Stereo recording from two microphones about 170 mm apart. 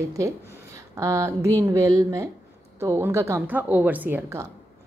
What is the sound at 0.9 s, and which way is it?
A woman's voice, 15° right (ahead or behind).